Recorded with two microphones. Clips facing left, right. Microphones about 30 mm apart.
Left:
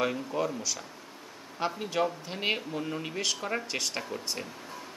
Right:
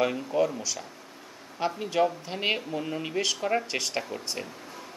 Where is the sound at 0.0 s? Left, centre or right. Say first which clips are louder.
Right 4 dB; centre.